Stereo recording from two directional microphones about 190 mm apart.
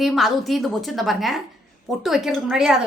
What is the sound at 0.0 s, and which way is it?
A woman's voice, centre (ahead or behind).